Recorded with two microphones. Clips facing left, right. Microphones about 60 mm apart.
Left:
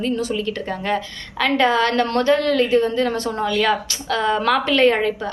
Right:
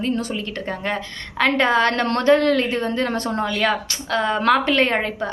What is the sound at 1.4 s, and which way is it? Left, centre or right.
A woman's voice, right.